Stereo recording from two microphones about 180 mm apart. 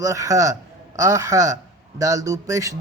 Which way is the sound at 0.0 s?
20° right (ahead or behind).